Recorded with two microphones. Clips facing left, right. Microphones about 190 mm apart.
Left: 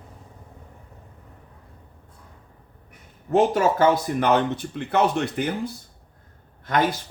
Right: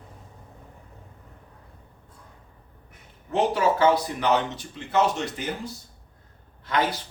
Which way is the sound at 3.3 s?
45° left (ahead or behind).